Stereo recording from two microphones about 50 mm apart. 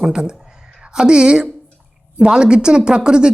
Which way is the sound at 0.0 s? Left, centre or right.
Centre.